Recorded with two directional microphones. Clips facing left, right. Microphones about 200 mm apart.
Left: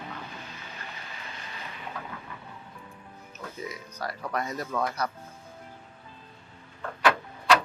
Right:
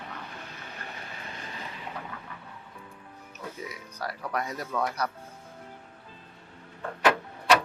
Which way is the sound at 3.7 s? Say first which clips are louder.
Left 1 dB; 10° right (ahead or behind).